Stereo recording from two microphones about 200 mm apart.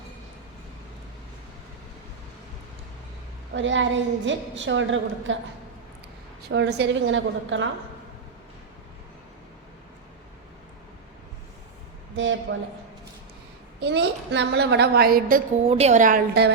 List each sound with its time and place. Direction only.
3.5 s a woman's voice: 70° right (ahead or behind)
6.5 s a woman's voice: 60° right (ahead or behind)
12.1 s a woman's voice: 70° right (ahead or behind)
13.8 s a woman's voice: 60° right (ahead or behind)
15.7 s a woman's voice: 35° right (ahead or behind); by 16.5 s 50° right (ahead or behind)